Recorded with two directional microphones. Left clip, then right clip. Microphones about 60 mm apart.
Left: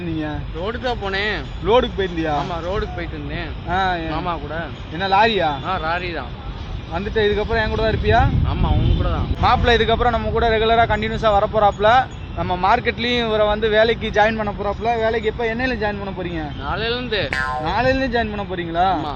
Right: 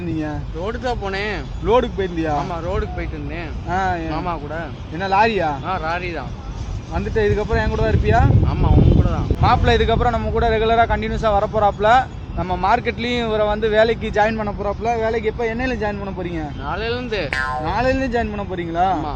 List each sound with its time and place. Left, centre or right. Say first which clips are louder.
0.2 s speech: even; centre
3.3 s speech: left 1 dB; centre
5.8 s speech: left 1 dB; right
16.7 s speech: left 2 dB; centre
17.3 s speech: right 1 dB; centre